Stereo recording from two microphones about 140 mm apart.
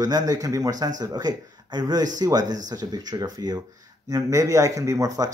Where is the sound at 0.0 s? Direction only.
25° right (ahead or behind).